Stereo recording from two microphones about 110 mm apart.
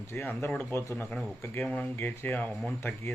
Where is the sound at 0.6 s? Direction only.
20° left (ahead or behind).